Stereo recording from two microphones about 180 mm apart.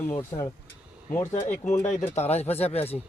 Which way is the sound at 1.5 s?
45° left (ahead or behind).